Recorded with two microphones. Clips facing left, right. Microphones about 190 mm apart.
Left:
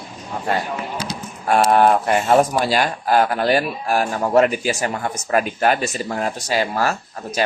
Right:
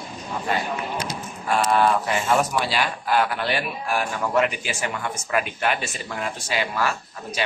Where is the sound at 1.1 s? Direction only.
75° left (ahead or behind).